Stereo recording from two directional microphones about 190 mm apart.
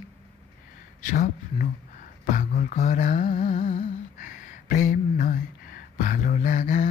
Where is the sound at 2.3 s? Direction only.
45° left (ahead or behind).